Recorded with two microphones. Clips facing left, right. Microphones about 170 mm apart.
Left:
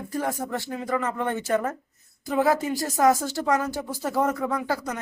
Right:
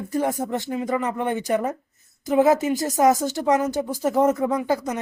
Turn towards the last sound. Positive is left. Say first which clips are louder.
# right 4 dB
turn(degrees=-20)  # may be behind; listen again after turning